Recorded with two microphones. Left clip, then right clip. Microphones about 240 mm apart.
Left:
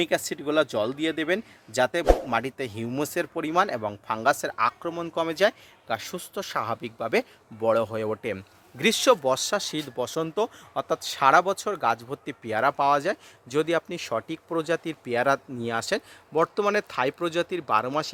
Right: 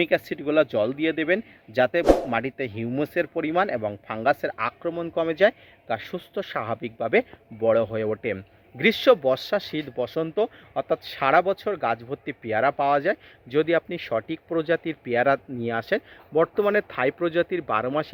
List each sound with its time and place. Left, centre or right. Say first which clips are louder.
0.0 s speech: right 3 dB; centre